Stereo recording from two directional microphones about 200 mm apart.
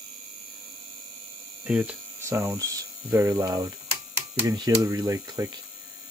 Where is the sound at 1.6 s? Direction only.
5° right (ahead or behind).